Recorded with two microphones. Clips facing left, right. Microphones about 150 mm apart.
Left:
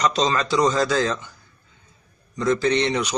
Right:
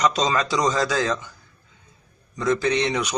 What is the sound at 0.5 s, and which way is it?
Speech, centre (ahead or behind).